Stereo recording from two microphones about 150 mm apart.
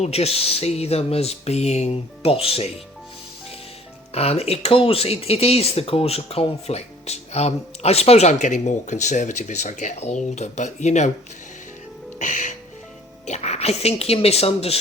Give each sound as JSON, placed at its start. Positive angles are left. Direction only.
{"t": 0.0, "sound": "speech", "side_deg": 45}
{"t": 4.1, "sound": "speech", "side_deg": 45}
{"t": 12.2, "sound": "music", "side_deg": 55}
{"t": 13.2, "sound": "speech", "side_deg": 50}